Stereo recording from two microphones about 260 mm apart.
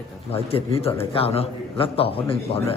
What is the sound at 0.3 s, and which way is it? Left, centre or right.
A man's voice, left.